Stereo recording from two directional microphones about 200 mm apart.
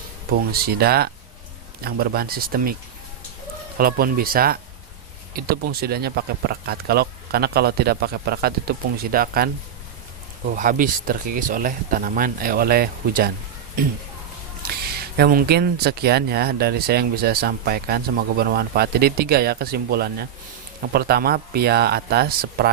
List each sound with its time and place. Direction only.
0.3 s speech: 50° right (ahead or behind)
3.8 s speech: 50° right (ahead or behind)
15.1 s speech: 50° right (ahead or behind)